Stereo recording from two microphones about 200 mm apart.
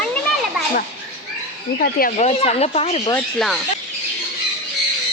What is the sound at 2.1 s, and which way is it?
Speech, 30° left (ahead or behind).